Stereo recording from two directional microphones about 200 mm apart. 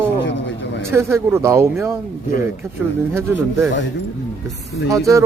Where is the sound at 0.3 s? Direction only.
65° left (ahead or behind).